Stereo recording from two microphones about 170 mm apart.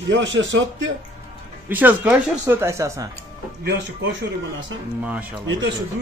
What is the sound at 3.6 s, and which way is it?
Speech, 90° right.